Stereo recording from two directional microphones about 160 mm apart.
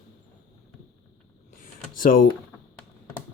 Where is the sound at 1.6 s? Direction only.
60° left (ahead or behind).